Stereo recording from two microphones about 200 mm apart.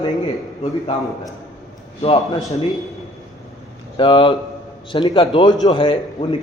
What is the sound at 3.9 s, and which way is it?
A man's voice, 25° left (ahead or behind).